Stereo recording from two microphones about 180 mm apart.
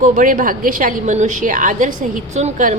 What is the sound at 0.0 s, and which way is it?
Speech, 45° right (ahead or behind).